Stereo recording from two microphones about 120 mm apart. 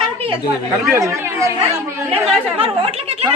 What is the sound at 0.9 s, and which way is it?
Speech, 25° right (ahead or behind).